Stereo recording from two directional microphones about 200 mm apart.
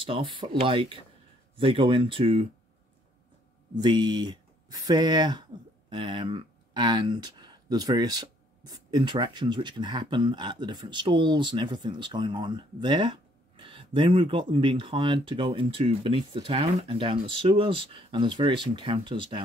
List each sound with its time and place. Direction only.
0.0 s speech: 25° right (ahead or behind)
3.7 s speech: 20° right (ahead or behind)